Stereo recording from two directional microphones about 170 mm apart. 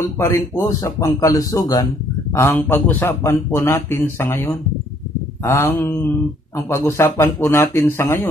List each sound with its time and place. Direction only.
0.2 s speech: 15° left (ahead or behind)